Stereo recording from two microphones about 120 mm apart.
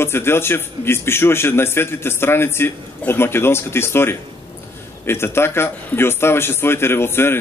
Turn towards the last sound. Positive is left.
turn(degrees=20)  # may be behind; listen again after turning